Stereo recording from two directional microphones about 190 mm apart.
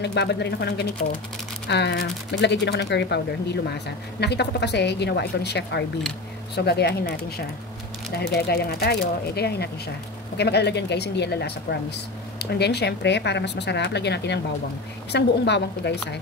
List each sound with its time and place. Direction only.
0.0 s speech: 65° left (ahead or behind)